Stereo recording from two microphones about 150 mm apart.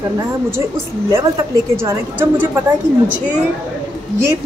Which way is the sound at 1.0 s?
20° right (ahead or behind).